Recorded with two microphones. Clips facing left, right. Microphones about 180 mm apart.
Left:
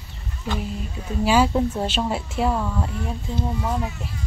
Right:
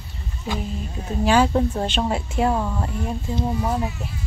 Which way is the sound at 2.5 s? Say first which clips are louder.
Right 1 dB; 10° right (ahead or behind).